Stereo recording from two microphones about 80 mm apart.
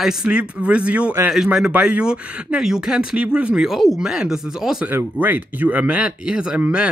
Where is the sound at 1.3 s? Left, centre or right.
Centre.